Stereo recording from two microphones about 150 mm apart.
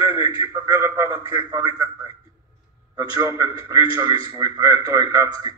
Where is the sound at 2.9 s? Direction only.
20° right (ahead or behind).